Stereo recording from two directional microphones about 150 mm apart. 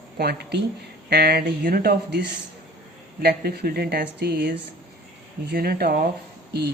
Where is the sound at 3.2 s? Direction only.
90° right.